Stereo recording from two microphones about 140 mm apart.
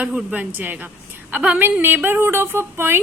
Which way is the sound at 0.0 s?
10° right (ahead or behind).